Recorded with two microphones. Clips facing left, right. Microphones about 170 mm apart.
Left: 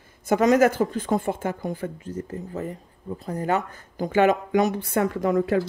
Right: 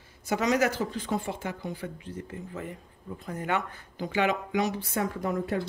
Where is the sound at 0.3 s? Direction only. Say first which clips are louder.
Left 8 dB; 50° left (ahead or behind).